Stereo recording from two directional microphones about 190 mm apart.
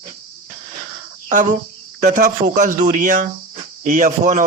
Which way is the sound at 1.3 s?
40° right (ahead or behind).